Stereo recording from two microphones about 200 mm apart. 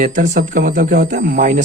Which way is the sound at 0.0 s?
40° right (ahead or behind).